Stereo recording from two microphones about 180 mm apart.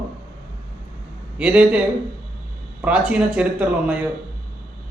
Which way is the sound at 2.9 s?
5° right (ahead or behind).